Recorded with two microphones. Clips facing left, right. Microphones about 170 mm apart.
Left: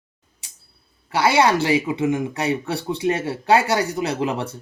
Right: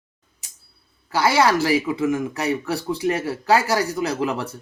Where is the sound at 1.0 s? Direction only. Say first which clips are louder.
Left 1 dB; 25° left (ahead or behind).